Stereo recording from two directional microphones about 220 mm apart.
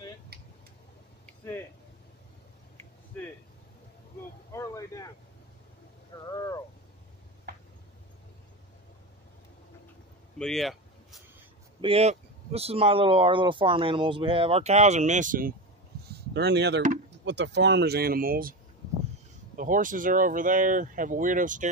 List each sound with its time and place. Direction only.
1.2 s a sound: 10° left (ahead or behind)
4.5 s vehicle: 15° left (ahead or behind)
6.2 s vehicle: 15° left (ahead or behind)
10.4 s a sound: centre (ahead or behind)
11.8 s speech: 30° right (ahead or behind)
16.3 s speech: 50° right (ahead or behind)